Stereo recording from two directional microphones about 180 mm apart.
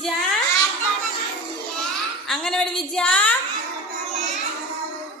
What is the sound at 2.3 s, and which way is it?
A woman's voice, 5° left (ahead or behind).